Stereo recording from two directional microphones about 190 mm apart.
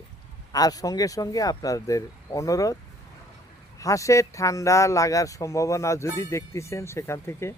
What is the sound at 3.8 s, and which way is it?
Speech, 15° left (ahead or behind).